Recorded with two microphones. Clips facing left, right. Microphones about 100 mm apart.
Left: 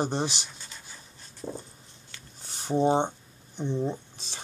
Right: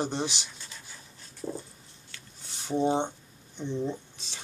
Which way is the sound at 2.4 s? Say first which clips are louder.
Left 4 dB; 40° left (ahead or behind).